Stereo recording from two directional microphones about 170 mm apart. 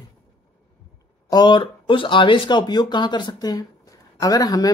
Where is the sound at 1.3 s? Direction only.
25° left (ahead or behind).